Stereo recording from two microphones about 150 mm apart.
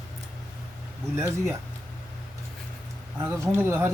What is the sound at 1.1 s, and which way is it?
Speech, 15° right (ahead or behind).